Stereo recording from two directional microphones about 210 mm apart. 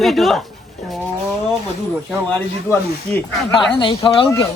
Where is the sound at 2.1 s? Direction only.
5° left (ahead or behind).